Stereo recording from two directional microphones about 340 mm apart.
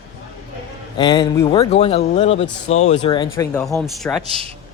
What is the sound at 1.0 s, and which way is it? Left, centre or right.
Speech, centre.